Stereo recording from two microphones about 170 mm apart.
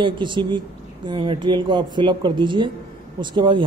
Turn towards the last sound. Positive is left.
turn(degrees=-30)  # may be behind; listen again after turning